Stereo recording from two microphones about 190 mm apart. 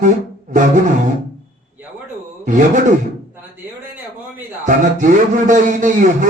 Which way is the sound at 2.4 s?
40° right (ahead or behind).